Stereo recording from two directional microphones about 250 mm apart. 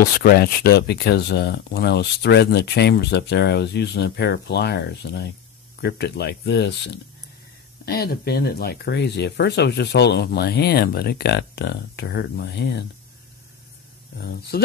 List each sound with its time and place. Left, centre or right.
0.0 s speech: left
14.2 s speech: left